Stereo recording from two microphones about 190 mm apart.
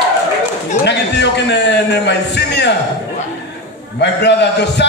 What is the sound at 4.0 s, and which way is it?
Speech, 65° left (ahead or behind).